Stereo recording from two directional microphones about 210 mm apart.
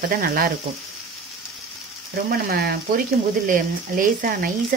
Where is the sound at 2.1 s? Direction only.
45° right (ahead or behind).